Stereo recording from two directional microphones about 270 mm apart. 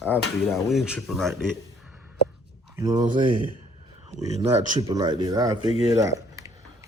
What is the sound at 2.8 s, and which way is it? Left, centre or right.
Speech, centre.